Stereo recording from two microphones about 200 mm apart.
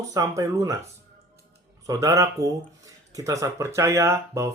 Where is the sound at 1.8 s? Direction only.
15° right (ahead or behind).